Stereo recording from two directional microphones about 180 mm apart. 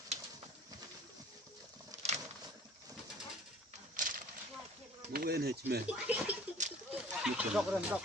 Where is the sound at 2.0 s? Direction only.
40° right (ahead or behind).